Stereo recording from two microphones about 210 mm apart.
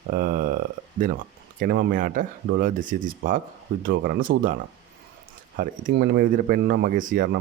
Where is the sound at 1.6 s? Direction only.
50° right (ahead or behind).